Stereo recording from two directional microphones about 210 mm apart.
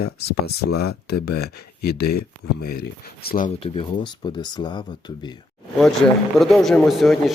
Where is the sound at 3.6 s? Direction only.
25° left (ahead or behind).